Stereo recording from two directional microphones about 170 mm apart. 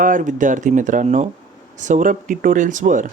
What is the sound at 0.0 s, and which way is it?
Speech, 50° right (ahead or behind).